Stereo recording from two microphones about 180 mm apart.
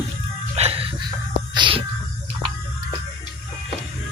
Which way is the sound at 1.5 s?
25° right (ahead or behind).